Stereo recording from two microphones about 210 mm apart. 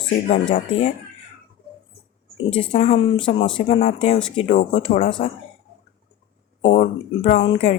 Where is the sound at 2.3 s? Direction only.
25° left (ahead or behind).